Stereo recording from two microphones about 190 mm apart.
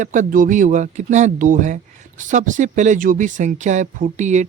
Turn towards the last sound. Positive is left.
turn(degrees=-40)  # may be behind; listen again after turning